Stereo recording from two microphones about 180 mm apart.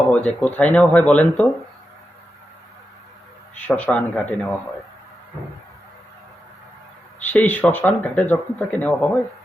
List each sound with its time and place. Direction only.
0.1 s speech: 5° left (ahead or behind)
3.7 s speech: 10° left (ahead or behind)
7.3 s speech: 10° left (ahead or behind)